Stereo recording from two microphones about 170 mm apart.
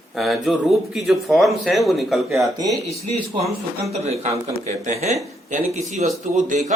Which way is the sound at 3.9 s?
40° right (ahead or behind).